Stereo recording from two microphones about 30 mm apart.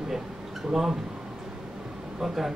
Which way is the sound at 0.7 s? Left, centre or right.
Centre.